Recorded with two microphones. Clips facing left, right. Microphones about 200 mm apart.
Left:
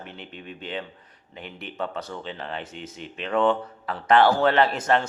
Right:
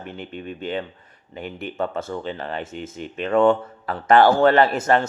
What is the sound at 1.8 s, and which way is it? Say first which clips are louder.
Speech: right 5 dB; 50° right (ahead or behind).